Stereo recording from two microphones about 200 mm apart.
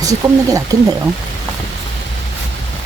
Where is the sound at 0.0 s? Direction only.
15° right (ahead or behind).